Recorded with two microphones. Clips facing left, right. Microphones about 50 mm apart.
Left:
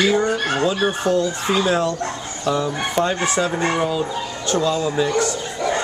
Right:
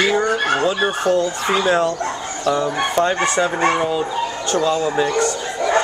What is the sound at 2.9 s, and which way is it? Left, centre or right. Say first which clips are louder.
Speech: right 2 dB; centre.